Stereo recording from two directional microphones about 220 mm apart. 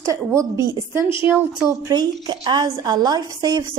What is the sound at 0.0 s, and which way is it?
A woman's voice, 15° right (ahead or behind).